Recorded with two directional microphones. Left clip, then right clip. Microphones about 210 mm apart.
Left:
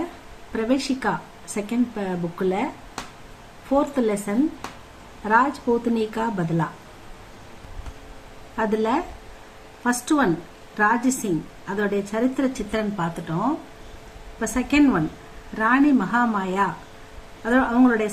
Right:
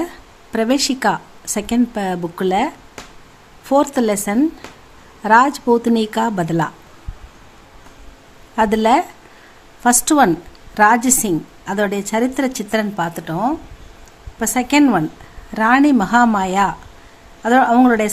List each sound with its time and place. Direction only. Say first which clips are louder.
0.5 s speech: right 6 dB; 55° right (ahead or behind)
3.7 s speech: right 6 dB; 55° right (ahead or behind)
8.5 s a woman's voice: right 9 dB; 55° right (ahead or behind)
14.3 s a woman's voice: right 6 dB; 55° right (ahead or behind)